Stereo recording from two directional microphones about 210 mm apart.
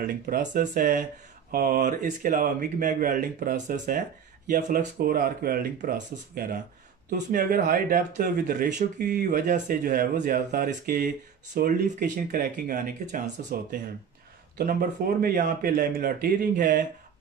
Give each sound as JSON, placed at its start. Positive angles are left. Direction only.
{"t": 0.0, "sound": "speech", "side_deg": -40}